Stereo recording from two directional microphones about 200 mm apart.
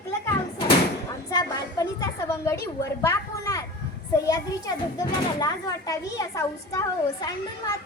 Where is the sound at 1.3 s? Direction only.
20° left (ahead or behind).